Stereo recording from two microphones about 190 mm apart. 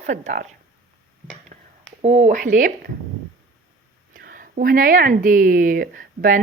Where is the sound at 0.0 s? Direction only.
40° right (ahead or behind).